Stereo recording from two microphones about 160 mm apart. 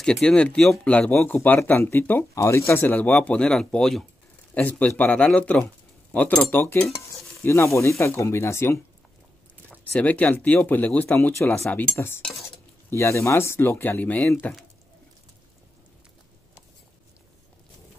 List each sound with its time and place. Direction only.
0.0 s speech: 5° left (ahead or behind)